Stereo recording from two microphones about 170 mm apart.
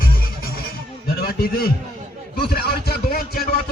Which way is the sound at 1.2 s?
65° left (ahead or behind).